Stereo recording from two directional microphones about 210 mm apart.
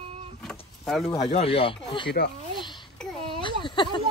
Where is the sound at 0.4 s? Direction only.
Centre (ahead or behind).